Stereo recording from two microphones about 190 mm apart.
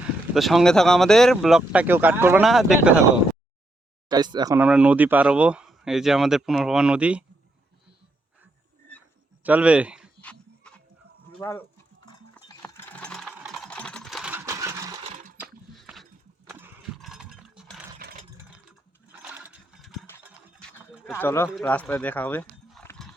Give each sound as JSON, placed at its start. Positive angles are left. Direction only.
{"t": 0.3, "sound": "speech", "side_deg": 0}
{"t": 4.1, "sound": "speech", "side_deg": -20}
{"t": 4.5, "sound": "speech", "side_deg": -5}
{"t": 9.4, "sound": "speech", "side_deg": -10}
{"t": 10.2, "sound": "a sound", "side_deg": 5}
{"t": 11.4, "sound": "speech", "side_deg": 20}
{"t": 12.6, "sound": "sewing machine", "side_deg": 5}
{"t": 15.0, "sound": "a sound", "side_deg": -35}
{"t": 15.4, "sound": "horse", "side_deg": 0}
{"t": 17.0, "sound": "a sound", "side_deg": -5}
{"t": 19.3, "sound": "engine", "side_deg": -5}
{"t": 20.6, "sound": "sheep", "side_deg": 5}
{"t": 21.5, "sound": "speech", "side_deg": 5}